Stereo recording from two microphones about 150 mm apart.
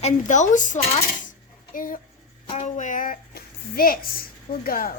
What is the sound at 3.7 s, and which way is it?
A woman's voice, 75° left (ahead or behind).